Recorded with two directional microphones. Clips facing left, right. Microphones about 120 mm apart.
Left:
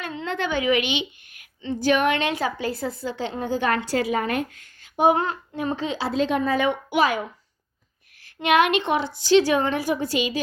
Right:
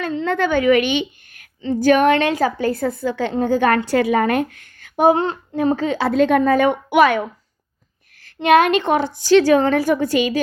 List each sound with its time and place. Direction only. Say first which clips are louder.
0.0 s a woman's voice: right 8 dB; 45° right (ahead or behind)
5.0 s child singing: right 4 dB; 30° right (ahead or behind)
5.5 s a woman's voice: right 9 dB; 45° right (ahead or behind); by 7.2 s 60° right (ahead or behind)
8.4 s a woman's voice: right 5 dB; 40° right (ahead or behind)